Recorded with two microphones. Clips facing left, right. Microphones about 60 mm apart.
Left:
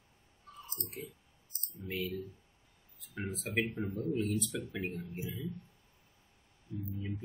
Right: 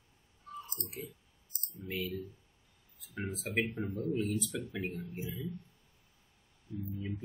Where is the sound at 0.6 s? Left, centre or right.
Right.